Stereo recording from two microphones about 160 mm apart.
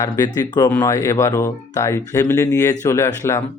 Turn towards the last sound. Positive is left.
turn(degrees=15)  # may be behind; listen again after turning